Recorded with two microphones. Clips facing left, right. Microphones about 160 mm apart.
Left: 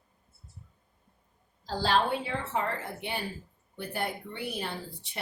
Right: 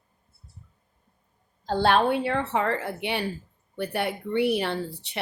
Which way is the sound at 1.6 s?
60° right (ahead or behind).